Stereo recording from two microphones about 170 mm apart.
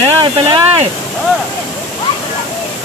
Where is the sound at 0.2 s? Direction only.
30° right (ahead or behind).